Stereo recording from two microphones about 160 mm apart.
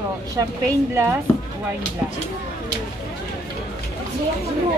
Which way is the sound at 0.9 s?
15° right (ahead or behind).